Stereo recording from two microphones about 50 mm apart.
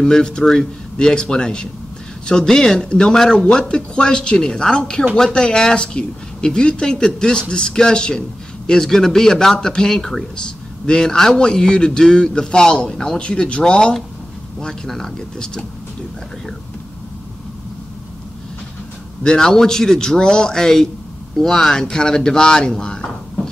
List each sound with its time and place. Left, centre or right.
0.0 s speech: centre
19.2 s speech: centre